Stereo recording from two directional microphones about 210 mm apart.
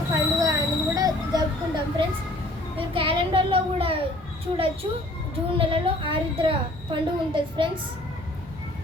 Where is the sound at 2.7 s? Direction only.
25° right (ahead or behind).